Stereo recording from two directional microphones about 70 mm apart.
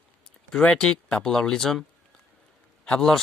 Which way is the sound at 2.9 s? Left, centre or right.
Centre.